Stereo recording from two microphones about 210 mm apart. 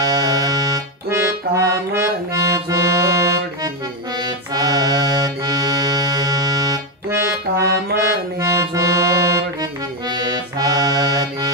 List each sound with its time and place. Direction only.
0.0 s accordion: 15° right (ahead or behind)